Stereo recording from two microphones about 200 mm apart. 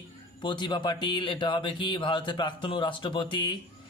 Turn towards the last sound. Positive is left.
turn(degrees=25)  # may be behind; listen again after turning